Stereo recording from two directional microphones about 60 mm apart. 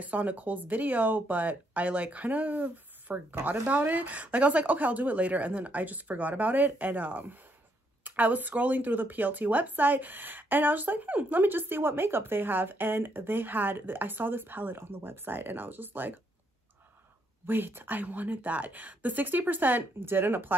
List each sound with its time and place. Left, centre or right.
0.0 s a woman's voice: right
17.5 s speech: right